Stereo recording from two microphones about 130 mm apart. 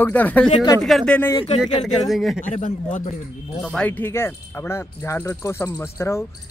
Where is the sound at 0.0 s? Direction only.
15° left (ahead or behind).